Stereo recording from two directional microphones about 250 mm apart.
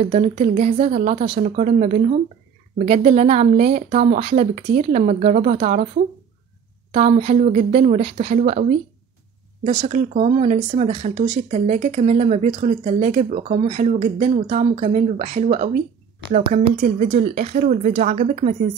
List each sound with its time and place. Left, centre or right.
0.0 s speech: right
9.7 s speech: right